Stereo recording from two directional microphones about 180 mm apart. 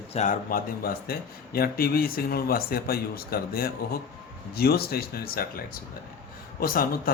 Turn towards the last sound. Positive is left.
turn(degrees=55)  # may be behind; listen again after turning